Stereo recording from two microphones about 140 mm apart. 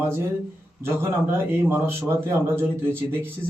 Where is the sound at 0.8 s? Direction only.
15° right (ahead or behind).